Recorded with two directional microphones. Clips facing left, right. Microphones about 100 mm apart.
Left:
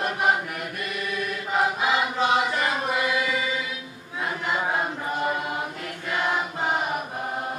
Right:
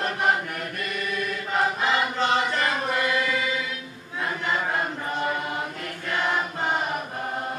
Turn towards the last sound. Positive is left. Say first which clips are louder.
# even
turn(degrees=10)  # may be behind; listen again after turning